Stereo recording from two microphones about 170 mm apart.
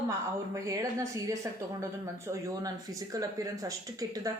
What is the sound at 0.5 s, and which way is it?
A man's voice, 20° right (ahead or behind).